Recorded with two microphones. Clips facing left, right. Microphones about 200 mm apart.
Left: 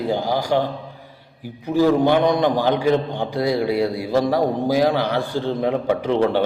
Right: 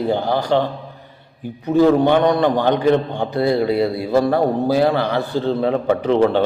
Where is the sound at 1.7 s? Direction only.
25° right (ahead or behind).